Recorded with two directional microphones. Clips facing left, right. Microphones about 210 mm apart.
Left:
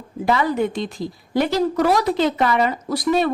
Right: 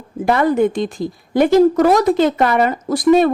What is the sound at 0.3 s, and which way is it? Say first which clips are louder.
A woman's voice: right 5 dB; 50° right (ahead or behind).